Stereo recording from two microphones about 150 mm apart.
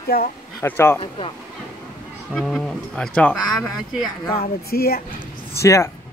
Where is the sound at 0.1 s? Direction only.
90° left.